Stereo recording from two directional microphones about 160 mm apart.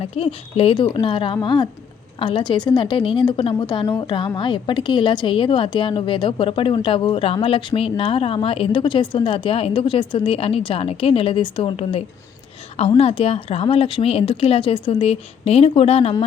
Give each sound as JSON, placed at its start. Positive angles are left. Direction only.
{"t": 0.0, "sound": "a woman's voice", "side_deg": 35}